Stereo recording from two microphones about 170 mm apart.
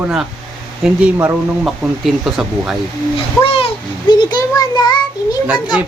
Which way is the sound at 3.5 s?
30° left (ahead or behind).